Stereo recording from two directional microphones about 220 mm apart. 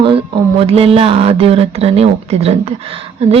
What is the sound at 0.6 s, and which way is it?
Speech, 25° right (ahead or behind).